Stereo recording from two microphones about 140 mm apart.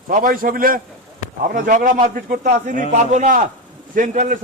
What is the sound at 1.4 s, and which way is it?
A man's voice, 80° right.